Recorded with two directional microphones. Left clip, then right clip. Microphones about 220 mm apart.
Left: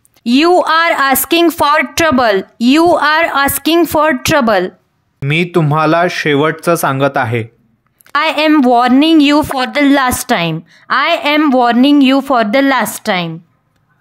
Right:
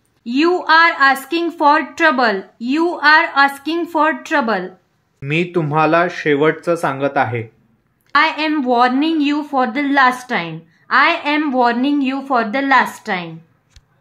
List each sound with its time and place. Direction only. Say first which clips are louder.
0.2 s a woman's voice: left 7 dB; 45° left (ahead or behind)
5.2 s a woman's voice: left 5 dB; 35° left (ahead or behind)